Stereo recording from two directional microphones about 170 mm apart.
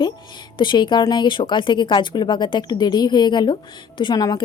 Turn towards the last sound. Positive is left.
turn(degrees=25)  # may be behind; listen again after turning